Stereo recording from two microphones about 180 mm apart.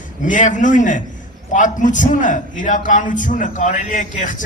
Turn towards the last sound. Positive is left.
turn(degrees=45)  # may be behind; listen again after turning